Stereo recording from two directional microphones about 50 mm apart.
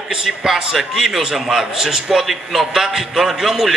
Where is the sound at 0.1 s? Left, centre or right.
Centre.